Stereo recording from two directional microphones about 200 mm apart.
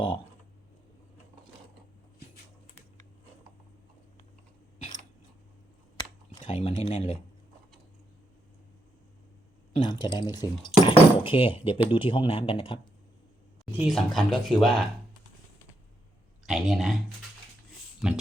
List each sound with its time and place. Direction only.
6.4 s speech: 30° left (ahead or behind)
9.7 s speech: 20° left (ahead or behind)
13.7 s speech: centre (ahead or behind)
16.5 s speech: centre (ahead or behind)
18.0 s speech: 5° right (ahead or behind)